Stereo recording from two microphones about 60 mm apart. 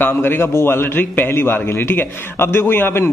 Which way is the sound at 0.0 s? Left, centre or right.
Left.